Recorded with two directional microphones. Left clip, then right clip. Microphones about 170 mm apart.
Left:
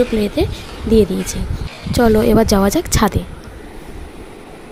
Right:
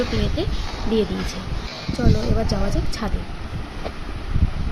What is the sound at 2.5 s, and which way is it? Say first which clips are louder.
Speech: left 11 dB; 65° left (ahead or behind).